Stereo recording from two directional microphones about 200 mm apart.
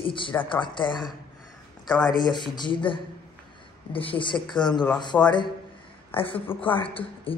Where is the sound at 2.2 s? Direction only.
20° left (ahead or behind).